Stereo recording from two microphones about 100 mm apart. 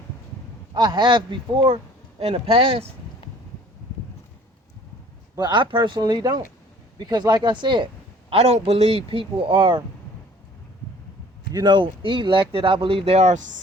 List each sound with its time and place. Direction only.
0.7 s speech: 50° right (ahead or behind); by 2.8 s 75° right (ahead or behind)
5.4 s speech: 50° right (ahead or behind)
8.3 s speech: 90° right; by 9.8 s 55° right (ahead or behind)
11.5 s speech: 50° right (ahead or behind); by 13.2 s 80° right